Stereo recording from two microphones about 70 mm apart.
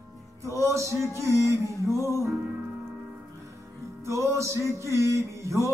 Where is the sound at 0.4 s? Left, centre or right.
Right.